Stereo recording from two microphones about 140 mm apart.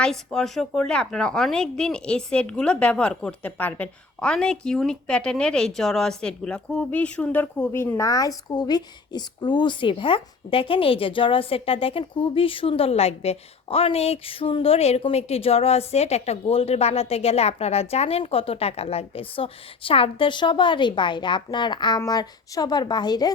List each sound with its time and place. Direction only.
0.0 s speech: 5° left (ahead or behind); by 23.3 s 30° left (ahead or behind)